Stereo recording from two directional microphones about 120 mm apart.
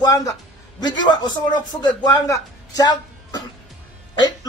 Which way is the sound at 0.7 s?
35° left (ahead or behind).